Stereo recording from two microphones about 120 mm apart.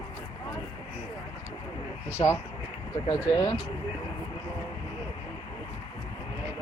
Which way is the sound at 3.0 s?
40° left (ahead or behind).